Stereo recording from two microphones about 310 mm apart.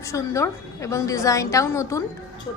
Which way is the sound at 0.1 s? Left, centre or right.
Centre.